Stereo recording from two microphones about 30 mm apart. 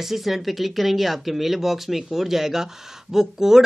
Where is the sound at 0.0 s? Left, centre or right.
Centre.